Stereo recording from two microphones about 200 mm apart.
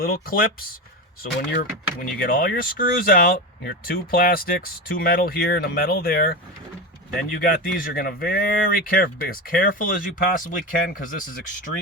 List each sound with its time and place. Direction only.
0.0 s speech: 45° left (ahead or behind)
2.0 s speech: 45° left (ahead or behind)